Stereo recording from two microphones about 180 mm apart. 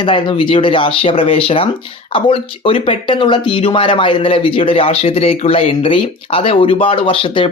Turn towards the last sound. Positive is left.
turn(degrees=30)  # may be behind; listen again after turning